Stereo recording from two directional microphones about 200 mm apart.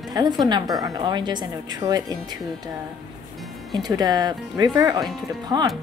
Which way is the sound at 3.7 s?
20° right (ahead or behind).